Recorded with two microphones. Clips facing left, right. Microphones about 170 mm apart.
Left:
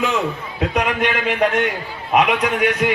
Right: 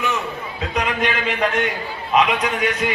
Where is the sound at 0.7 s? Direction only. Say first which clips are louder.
Left 1 dB; 60° left (ahead or behind).